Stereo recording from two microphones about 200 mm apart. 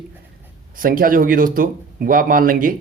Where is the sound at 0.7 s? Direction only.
45° right (ahead or behind).